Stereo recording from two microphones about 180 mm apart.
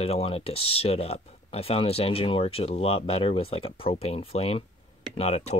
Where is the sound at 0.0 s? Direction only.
35° left (ahead or behind).